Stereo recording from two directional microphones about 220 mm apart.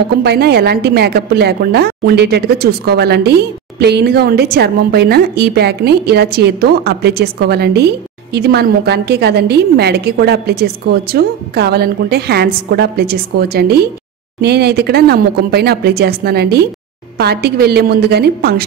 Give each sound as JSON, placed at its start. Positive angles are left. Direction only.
{"t": 0.2, "sound": "speech", "side_deg": -45}